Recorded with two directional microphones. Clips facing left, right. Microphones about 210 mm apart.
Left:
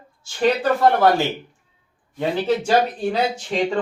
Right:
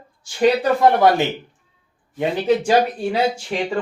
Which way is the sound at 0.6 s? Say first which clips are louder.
Right 1 dB; 15° right (ahead or behind).